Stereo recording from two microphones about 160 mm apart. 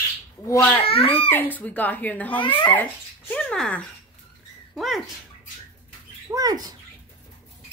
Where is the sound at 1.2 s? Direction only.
10° left (ahead or behind).